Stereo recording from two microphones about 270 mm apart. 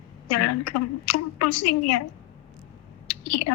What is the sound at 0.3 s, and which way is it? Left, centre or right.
A woman's voice, left.